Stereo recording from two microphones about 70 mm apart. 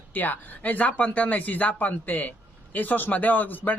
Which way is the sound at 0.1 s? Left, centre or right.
Left.